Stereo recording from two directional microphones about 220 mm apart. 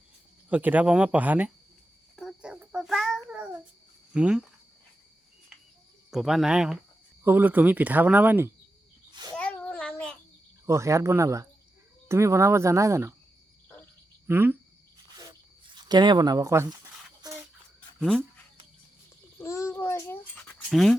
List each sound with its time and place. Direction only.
0.5 s speech: 5° right (ahead or behind)
2.1 s child singing: centre (ahead or behind)
4.1 s speech: 5° right (ahead or behind)
6.1 s speech: centre (ahead or behind)
9.3 s child singing: 5° left (ahead or behind)
10.7 s speech: 15° right (ahead or behind)
14.3 s speech: 10° right (ahead or behind)
15.2 s a sound: 20° right (ahead or behind)
17.7 s a sound: 5° left (ahead or behind)
19.4 s a sound: 10° left (ahead or behind)
20.7 s speech: centre (ahead or behind)